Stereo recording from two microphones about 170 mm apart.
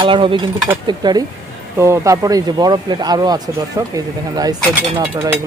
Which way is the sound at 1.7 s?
15° right (ahead or behind).